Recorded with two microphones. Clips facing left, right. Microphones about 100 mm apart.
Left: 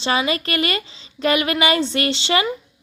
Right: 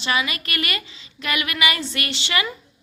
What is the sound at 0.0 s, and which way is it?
A woman's voice, 30° left (ahead or behind).